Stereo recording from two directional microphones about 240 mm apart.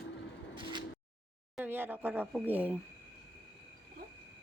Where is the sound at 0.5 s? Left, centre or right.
Centre.